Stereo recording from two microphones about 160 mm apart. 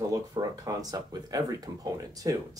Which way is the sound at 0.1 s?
20° right (ahead or behind).